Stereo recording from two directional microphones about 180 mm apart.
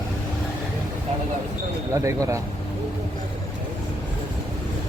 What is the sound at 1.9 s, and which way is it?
Speech, 15° right (ahead or behind).